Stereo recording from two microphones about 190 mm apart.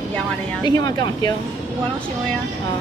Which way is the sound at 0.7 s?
20° left (ahead or behind).